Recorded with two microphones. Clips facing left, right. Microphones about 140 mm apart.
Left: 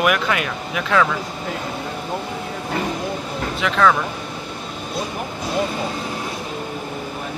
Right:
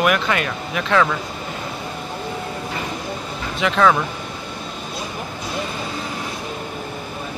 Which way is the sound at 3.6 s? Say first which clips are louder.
Right 1 dB; 5° right (ahead or behind).